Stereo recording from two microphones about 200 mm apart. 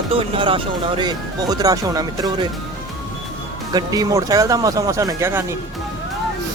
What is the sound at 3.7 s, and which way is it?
Speech, 20° right (ahead or behind).